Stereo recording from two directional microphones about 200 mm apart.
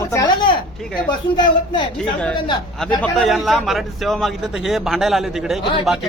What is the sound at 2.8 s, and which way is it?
A man's voice, centre (ahead or behind).